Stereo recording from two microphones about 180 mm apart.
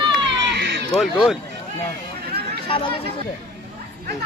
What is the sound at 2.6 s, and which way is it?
Speech, 30° left (ahead or behind).